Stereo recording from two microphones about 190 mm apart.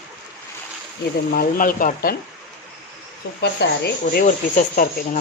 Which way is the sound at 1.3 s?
45° left (ahead or behind).